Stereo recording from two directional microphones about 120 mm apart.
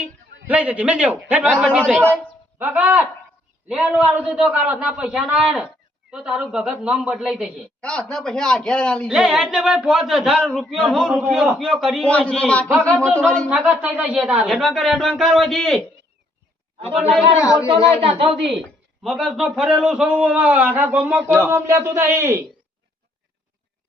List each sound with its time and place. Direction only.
0.0 s a man's voice: 10° right (ahead or behind)
7.8 s a man's voice: 10° left (ahead or behind)
9.0 s a man's voice: 5° right (ahead or behind)
13.5 s speech: 5° right (ahead or behind)
17.4 s speech: 25° left (ahead or behind)
17.7 s speech: 50° right (ahead or behind)
19.0 s a man's voice: centre (ahead or behind); by 21.2 s 20° right (ahead or behind)
21.2 s a man's voice: 15° left (ahead or behind)
21.5 s speech: 25° right (ahead or behind)